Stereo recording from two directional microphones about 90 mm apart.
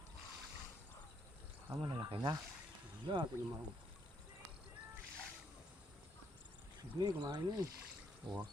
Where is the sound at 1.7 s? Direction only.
30° right (ahead or behind).